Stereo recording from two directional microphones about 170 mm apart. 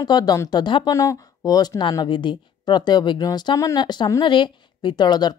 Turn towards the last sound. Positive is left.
turn(degrees=25)  # may be behind; listen again after turning